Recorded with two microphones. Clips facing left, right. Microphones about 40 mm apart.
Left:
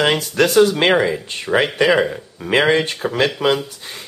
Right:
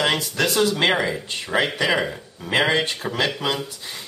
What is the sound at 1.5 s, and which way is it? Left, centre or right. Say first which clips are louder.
Speech: left 5 dB; left.